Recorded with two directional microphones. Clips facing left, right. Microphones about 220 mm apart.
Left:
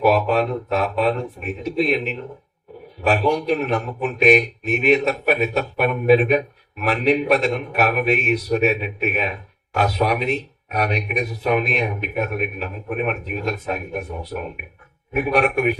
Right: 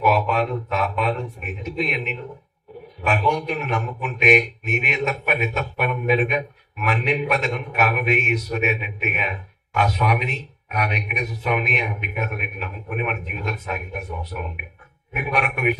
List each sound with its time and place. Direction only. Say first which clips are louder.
0.0 s a man's voice: left 3 dB; 35° left (ahead or behind)
15.1 s a man's voice: left 7 dB; 35° left (ahead or behind)